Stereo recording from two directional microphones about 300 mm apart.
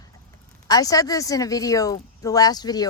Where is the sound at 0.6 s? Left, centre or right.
Centre.